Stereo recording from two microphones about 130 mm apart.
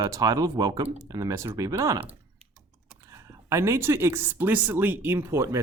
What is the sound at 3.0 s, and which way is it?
Speech, 25° right (ahead or behind).